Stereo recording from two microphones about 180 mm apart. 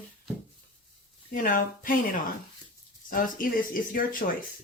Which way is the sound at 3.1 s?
50° left (ahead or behind).